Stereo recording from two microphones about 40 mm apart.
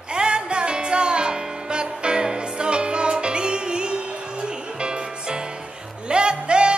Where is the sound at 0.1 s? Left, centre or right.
Right.